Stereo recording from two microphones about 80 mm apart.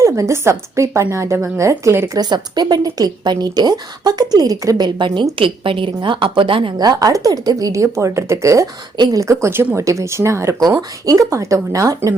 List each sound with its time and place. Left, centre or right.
0.0 s a woman's voice: right
2.1 s a woman's voice: right
4.9 s a woman's voice: right
6.8 s a woman's voice: right
10.8 s speech: right